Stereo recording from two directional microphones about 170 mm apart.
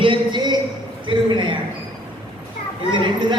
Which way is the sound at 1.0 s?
30° right (ahead or behind).